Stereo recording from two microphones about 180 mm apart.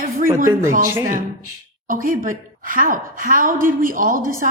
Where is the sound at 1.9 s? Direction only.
50° right (ahead or behind).